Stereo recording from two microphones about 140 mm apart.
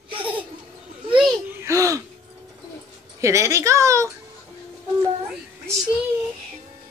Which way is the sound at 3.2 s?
20° right (ahead or behind).